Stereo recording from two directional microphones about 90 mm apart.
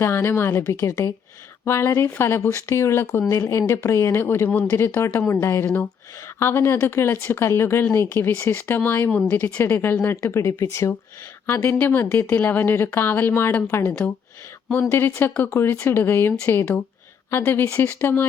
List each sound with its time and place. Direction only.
0.0 s a woman's voice: 30° left (ahead or behind)
4.4 s speech: 15° left (ahead or behind)
4.8 s a woman's voice: 30° left (ahead or behind)